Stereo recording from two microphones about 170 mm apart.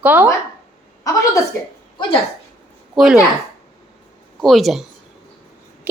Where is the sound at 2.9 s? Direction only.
5° right (ahead or behind).